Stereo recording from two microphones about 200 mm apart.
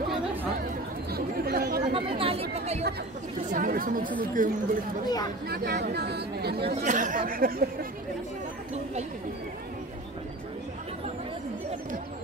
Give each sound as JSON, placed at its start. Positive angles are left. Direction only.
{"t": 1.1, "sound": "chatter", "side_deg": -50}
{"t": 2.0, "sound": "chatter", "side_deg": -25}
{"t": 3.5, "sound": "chatter", "side_deg": -45}
{"t": 4.4, "sound": "speech", "side_deg": -40}
{"t": 5.0, "sound": "speech", "side_deg": 20}
{"t": 5.5, "sound": "speech", "side_deg": -55}
{"t": 6.8, "sound": "speech", "side_deg": -40}